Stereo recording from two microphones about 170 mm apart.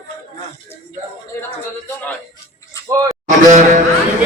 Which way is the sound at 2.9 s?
20° right (ahead or behind).